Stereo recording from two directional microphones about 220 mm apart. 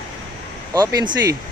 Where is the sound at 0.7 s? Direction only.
15° right (ahead or behind).